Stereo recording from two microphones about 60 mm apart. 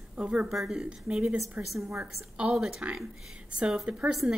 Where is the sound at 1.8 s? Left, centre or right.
Right.